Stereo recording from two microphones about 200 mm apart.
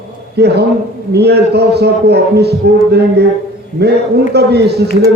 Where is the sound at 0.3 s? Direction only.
55° right (ahead or behind).